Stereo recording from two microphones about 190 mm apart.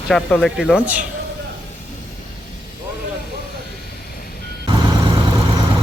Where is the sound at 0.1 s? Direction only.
Centre (ahead or behind).